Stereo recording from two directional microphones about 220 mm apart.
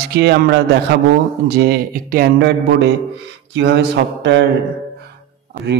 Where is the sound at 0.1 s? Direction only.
50° right (ahead or behind).